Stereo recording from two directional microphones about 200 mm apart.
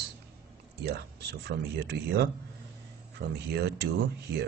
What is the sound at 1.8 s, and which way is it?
Speech, 55° right (ahead or behind).